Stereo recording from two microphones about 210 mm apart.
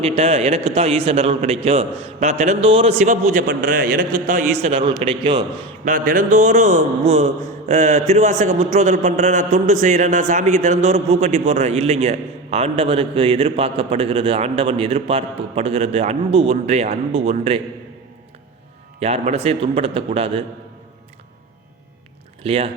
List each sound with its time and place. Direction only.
0.0 s a man's voice: 30° right (ahead or behind)
5.8 s a man's voice: 40° right (ahead or behind)
18.9 s a man's voice: 30° right (ahead or behind)
22.4 s a man's voice: 30° right (ahead or behind)